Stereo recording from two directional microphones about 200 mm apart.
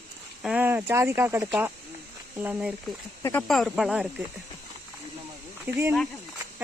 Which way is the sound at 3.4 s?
Centre (ahead or behind).